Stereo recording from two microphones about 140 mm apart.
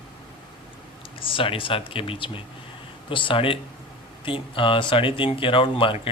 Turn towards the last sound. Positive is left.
turn(degrees=40)  # may be behind; listen again after turning